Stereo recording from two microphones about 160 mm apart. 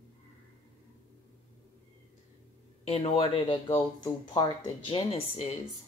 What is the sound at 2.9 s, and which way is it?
A woman's voice, 35° left (ahead or behind).